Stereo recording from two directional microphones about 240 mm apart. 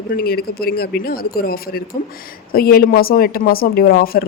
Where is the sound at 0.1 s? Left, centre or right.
Left.